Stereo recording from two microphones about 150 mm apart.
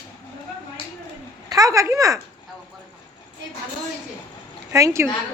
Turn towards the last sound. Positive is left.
turn(degrees=-20)  # may be behind; listen again after turning